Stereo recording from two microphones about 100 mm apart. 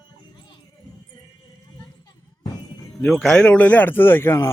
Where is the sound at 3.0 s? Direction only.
5° left (ahead or behind); by 4.5 s 25° left (ahead or behind).